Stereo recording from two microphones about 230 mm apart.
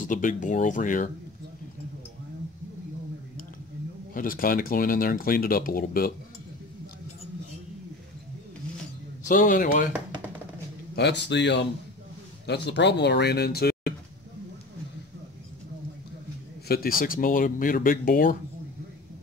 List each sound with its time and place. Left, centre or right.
0.0 s speech: left
4.1 s speech: left
9.3 s speech: left
11.0 s speech: left
16.6 s speech: left